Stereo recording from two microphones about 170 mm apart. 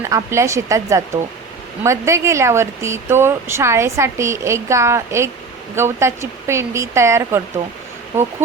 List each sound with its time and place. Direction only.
0.0 s speech: 15° right (ahead or behind)